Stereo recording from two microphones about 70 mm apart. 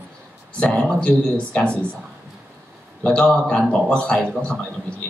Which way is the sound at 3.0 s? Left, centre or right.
Centre.